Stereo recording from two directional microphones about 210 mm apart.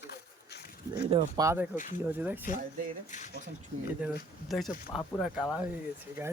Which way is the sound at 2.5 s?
40° left (ahead or behind).